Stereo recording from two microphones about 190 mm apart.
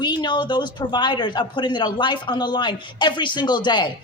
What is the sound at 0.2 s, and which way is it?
A woman's voice, 25° left (ahead or behind).